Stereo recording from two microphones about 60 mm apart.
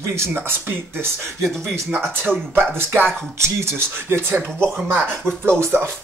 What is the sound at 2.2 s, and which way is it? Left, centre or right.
Speech, right.